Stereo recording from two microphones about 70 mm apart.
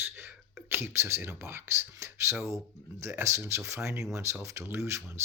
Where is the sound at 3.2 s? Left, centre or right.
Right.